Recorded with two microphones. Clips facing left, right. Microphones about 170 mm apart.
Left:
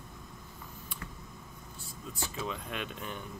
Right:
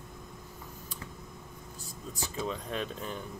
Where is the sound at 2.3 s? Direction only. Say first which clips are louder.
Right 5 dB; 35° right (ahead or behind).